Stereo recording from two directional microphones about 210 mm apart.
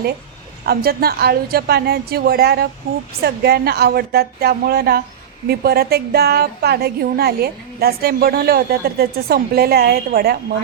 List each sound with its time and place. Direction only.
0.6 s a woman's voice: 50° right (ahead or behind)